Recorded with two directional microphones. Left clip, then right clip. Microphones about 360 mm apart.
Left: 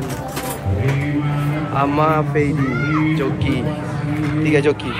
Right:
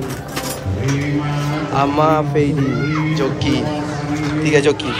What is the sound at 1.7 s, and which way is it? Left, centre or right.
A man's voice, centre.